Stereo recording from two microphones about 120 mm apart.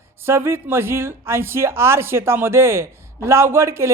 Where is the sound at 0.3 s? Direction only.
20° right (ahead or behind).